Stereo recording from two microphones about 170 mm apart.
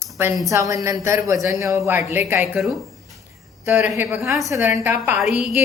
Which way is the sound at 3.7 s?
10° right (ahead or behind).